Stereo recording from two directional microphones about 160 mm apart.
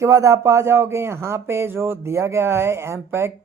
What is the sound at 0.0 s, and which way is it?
Speech, 20° right (ahead or behind).